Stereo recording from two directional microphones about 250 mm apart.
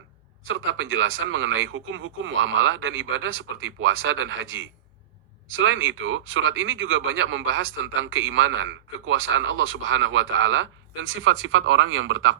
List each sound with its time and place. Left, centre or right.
0.4 s speech: right